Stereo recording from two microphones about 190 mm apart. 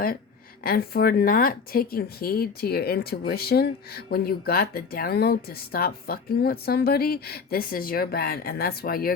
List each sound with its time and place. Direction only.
0.6 s speech: 55° left (ahead or behind)